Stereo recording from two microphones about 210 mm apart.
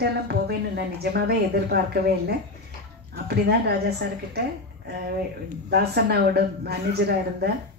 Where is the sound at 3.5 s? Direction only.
50° right (ahead or behind).